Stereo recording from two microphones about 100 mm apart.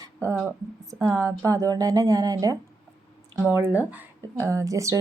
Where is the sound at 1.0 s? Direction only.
35° right (ahead or behind).